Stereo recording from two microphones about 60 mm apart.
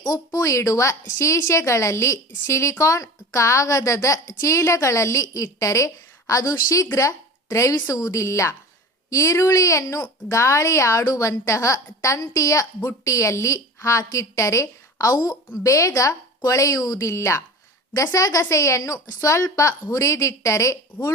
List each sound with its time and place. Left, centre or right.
0.1 s a woman's voice: left
7.9 s a woman's voice: left
8.2 s a woman's voice: left
15.6 s a woman's voice: left
17.9 s a woman's voice: left